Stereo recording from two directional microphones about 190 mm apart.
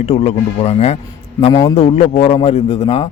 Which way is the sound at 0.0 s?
30° left (ahead or behind).